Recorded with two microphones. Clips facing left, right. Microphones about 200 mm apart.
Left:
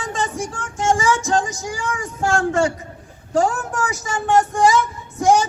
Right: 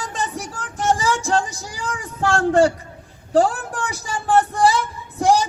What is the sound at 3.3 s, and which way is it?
Speech, 35° right (ahead or behind).